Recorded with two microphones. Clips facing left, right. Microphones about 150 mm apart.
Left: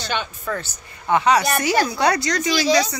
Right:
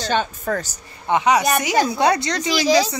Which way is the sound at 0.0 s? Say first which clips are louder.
Right 5 dB; 40° right (ahead or behind).